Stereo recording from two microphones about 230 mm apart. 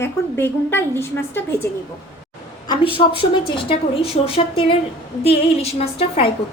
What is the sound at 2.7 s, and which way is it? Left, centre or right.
A woman's voice, left.